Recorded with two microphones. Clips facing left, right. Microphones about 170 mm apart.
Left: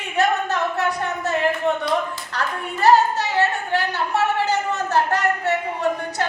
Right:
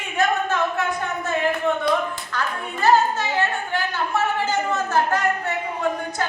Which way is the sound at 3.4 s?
35° left (ahead or behind).